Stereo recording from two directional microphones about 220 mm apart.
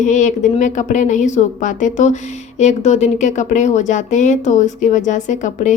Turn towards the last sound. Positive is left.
turn(degrees=35)  # may be behind; listen again after turning